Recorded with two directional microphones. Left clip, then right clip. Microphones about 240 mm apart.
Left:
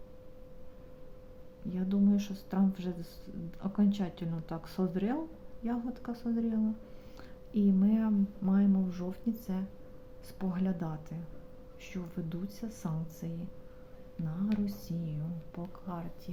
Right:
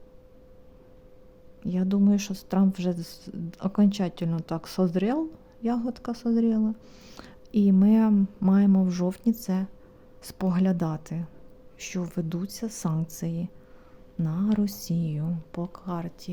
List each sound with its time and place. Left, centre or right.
1.6 s speech: right